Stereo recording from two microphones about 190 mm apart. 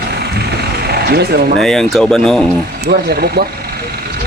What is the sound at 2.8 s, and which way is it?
Speech, 55° right (ahead or behind).